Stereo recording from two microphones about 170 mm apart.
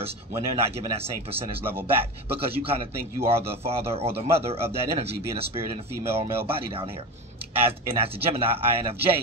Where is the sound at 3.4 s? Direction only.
35° right (ahead or behind).